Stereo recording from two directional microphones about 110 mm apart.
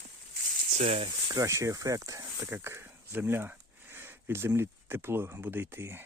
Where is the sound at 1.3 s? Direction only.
30° right (ahead or behind).